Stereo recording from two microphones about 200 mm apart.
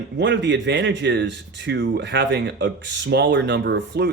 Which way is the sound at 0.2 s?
60° right (ahead or behind).